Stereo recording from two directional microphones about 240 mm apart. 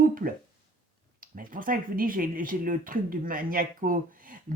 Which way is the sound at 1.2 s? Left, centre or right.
Right.